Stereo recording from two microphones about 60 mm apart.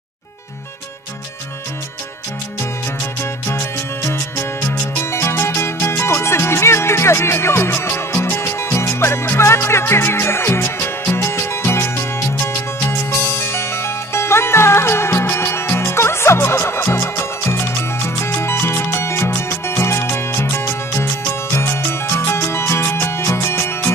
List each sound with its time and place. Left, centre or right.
3.4 s music: left
13.4 s music: left